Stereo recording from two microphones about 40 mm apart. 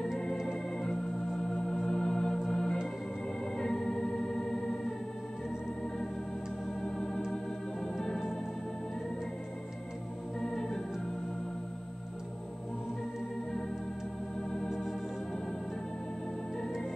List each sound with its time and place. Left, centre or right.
1.5 s organ: centre
6.8 s organ: centre
10.4 s organ: centre
14.7 s organ: centre